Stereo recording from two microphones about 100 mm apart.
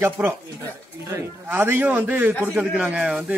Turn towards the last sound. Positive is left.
turn(degrees=-5)  # may be behind; listen again after turning